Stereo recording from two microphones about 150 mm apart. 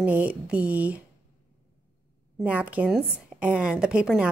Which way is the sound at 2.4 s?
10° right (ahead or behind).